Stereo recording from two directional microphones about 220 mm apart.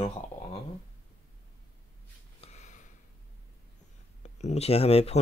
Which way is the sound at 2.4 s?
30° left (ahead or behind).